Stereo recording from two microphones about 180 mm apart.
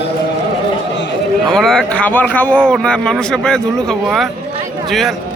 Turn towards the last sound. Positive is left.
turn(degrees=5)  # may be behind; listen again after turning